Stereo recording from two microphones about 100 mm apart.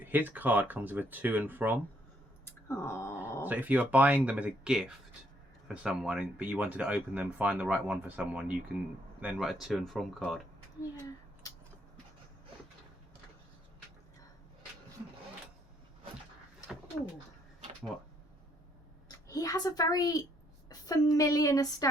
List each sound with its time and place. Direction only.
0.0 s speech: 20° right (ahead or behind)
2.4 s a sound: 25° left (ahead or behind)
3.4 s speech: 15° right (ahead or behind)
9.2 s speech: 5° right (ahead or behind)
19.0 s a woman's voice: 35° left (ahead or behind)